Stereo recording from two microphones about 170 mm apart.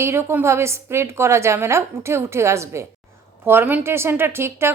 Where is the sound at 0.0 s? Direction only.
15° right (ahead or behind).